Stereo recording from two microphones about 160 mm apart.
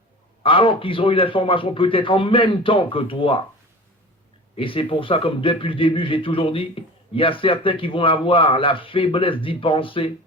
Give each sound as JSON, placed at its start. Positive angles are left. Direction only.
{"t": 0.4, "sound": "speech", "side_deg": 35}
{"t": 4.5, "sound": "speech", "side_deg": 35}